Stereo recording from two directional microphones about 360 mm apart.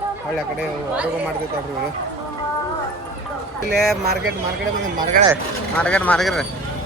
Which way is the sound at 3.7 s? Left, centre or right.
Centre.